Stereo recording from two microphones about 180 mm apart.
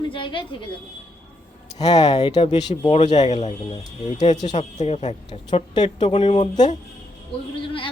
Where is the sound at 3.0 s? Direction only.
40° left (ahead or behind).